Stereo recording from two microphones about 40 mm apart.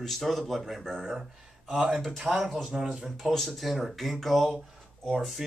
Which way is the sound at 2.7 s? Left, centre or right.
Right.